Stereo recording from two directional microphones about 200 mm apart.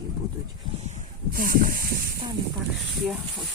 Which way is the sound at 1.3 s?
45° right (ahead or behind).